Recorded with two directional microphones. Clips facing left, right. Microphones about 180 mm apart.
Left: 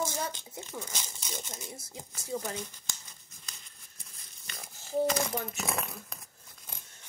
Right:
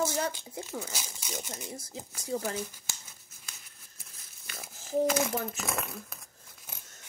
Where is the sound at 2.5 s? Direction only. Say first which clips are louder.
Right 3 dB; 5° right (ahead or behind).